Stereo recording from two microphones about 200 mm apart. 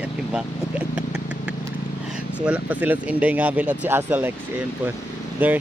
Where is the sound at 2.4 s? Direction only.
5° right (ahead or behind).